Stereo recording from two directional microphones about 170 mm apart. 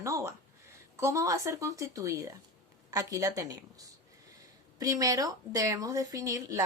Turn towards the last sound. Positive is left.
turn(degrees=-20)  # may be behind; listen again after turning